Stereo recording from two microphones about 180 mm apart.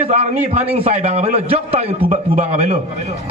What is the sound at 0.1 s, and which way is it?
A man's voice, 40° right (ahead or behind).